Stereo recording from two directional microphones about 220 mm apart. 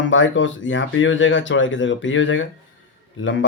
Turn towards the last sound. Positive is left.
turn(degrees=55)  # may be behind; listen again after turning